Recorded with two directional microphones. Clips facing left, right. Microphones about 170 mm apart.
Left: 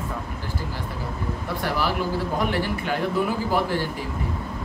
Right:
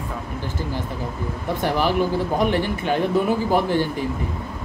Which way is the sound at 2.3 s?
20° right (ahead or behind).